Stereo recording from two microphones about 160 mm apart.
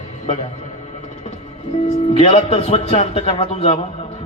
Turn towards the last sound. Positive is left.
turn(degrees=35)  # may be behind; listen again after turning